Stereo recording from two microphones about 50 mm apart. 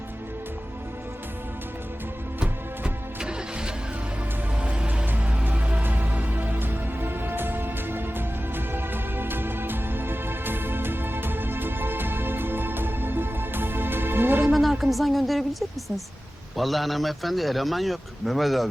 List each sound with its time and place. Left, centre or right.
2.4 s music: centre
4.6 s music: right
14.5 s music: centre
16.6 s speech: centre